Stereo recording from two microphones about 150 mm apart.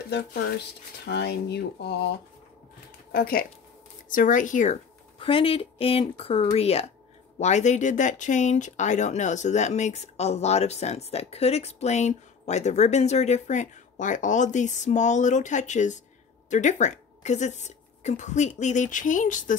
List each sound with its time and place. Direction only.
1.2 s speech: 90° left
3.1 s speech: 85° left
4.1 s speech: 60° left (ahead or behind)
5.2 s a woman's voice: 35° left (ahead or behind); by 19.5 s 60° left (ahead or behind)